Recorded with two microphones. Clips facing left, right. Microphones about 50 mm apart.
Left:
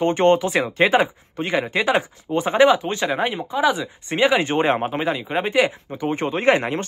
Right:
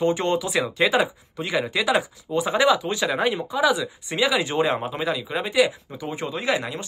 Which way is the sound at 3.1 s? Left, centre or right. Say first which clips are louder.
Right 1 dB; left.